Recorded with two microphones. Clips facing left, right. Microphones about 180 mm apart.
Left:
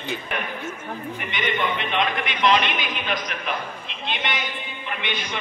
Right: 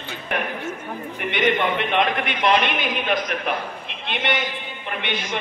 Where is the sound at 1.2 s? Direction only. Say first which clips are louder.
Right 6 dB; 60° right (ahead or behind).